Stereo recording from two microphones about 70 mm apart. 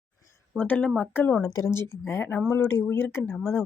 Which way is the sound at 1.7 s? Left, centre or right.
Left.